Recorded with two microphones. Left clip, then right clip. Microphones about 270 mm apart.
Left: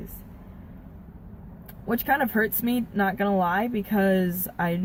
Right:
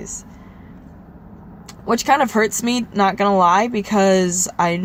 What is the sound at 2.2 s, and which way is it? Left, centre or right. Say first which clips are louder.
Speech: right 8 dB; right.